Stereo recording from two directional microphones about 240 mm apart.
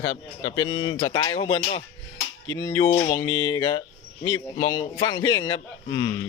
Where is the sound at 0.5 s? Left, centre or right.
Left.